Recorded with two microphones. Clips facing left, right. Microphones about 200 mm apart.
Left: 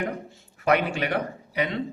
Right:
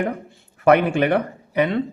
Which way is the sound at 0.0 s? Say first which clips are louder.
Right 5 dB; 60° right (ahead or behind).